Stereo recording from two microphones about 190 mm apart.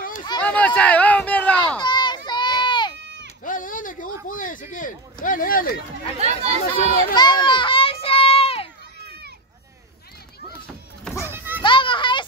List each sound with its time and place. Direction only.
0.4 s a sound: 10° left (ahead or behind)
1.8 s a sound: 25° left (ahead or behind)
3.0 s sheep: 70° right (ahead or behind)
3.4 s a sound: 45° left (ahead or behind)
4.3 s speech: 45° left (ahead or behind)
6.1 s speech: 35° right (ahead or behind)
7.2 s children playing: 25° left (ahead or behind)
11.2 s children playing: 10° right (ahead or behind)
11.6 s children playing: 25° left (ahead or behind)